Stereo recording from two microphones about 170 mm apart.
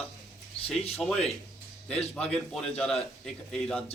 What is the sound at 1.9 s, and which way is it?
Speech, 40° left (ahead or behind).